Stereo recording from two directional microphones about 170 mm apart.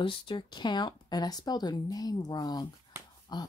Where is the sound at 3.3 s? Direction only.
25° left (ahead or behind).